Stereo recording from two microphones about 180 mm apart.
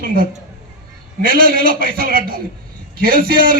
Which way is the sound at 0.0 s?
50° right (ahead or behind).